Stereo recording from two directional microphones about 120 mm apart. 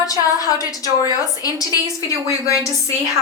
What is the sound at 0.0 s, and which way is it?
A woman's voice, 30° left (ahead or behind).